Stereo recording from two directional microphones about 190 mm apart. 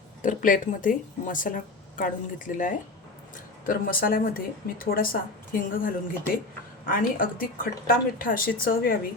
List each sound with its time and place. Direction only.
0.2 s speech: 45° left (ahead or behind)